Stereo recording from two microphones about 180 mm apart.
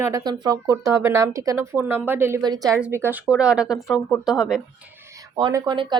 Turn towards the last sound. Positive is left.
turn(degrees=-30)  # may be behind; listen again after turning